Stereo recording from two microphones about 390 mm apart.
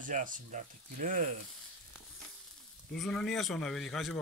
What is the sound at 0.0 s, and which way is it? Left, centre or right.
Speech, centre.